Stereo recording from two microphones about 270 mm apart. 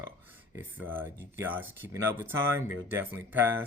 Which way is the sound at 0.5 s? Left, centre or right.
Centre.